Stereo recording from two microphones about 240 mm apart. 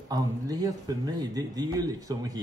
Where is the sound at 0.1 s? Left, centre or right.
Centre.